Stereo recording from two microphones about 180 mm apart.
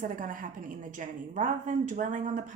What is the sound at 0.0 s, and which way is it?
A woman's voice, 50° right (ahead or behind).